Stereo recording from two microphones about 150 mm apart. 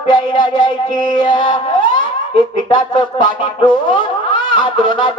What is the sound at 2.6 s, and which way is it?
Speech, 30° left (ahead or behind).